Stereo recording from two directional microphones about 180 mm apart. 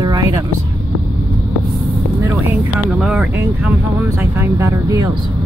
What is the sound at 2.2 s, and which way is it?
Speech, 15° right (ahead or behind).